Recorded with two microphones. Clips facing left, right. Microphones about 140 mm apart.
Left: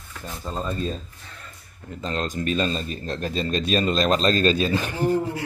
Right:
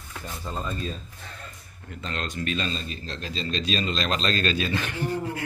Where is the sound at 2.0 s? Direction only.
35° left (ahead or behind).